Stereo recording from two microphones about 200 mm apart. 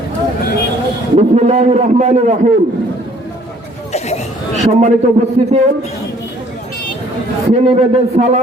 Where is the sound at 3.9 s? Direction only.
35° left (ahead or behind).